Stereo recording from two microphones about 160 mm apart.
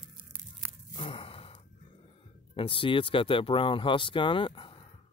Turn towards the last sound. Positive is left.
turn(degrees=30)  # may be behind; listen again after turning